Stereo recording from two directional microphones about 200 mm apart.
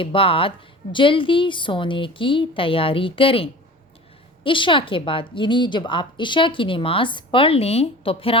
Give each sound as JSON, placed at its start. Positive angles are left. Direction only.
{"t": 0.0, "sound": "a woman's voice", "side_deg": 25}